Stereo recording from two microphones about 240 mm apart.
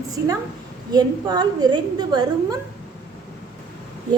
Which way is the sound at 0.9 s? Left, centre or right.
Centre.